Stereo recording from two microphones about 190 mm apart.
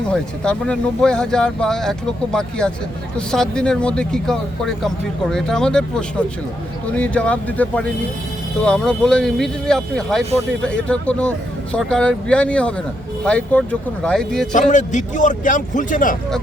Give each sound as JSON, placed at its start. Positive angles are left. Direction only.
{"t": 0.1, "sound": "speech", "side_deg": 5}
{"t": 14.5, "sound": "a man's voice", "side_deg": 40}